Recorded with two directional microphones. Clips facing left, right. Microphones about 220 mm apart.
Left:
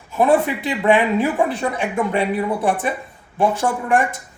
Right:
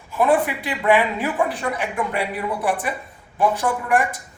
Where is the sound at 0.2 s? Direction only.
25° left (ahead or behind).